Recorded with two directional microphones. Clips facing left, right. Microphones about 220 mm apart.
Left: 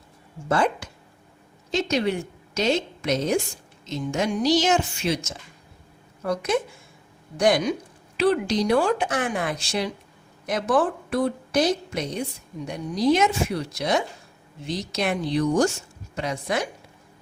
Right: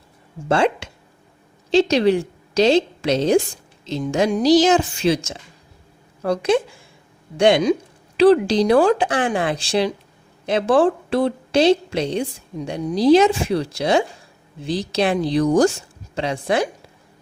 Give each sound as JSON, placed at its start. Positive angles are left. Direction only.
{"t": 0.4, "sound": "a woman's voice", "side_deg": -30}
{"t": 8.6, "sound": "speech", "side_deg": -90}
{"t": 8.9, "sound": "a woman's voice", "side_deg": -30}